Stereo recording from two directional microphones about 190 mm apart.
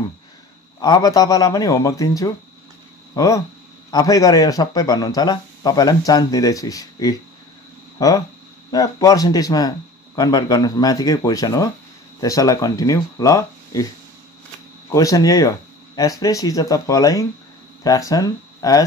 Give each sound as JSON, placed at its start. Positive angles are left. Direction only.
{"t": 0.7, "sound": "speech", "side_deg": 20}
{"t": 14.9, "sound": "speech", "side_deg": 20}